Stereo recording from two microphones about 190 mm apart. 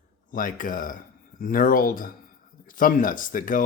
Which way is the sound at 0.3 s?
45° left (ahead or behind).